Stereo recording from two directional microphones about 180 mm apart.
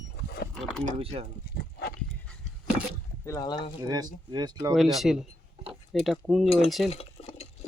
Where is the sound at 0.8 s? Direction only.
35° right (ahead or behind).